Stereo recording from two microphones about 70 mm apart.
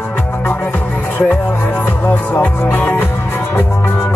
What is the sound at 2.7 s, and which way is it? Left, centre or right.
Music, left.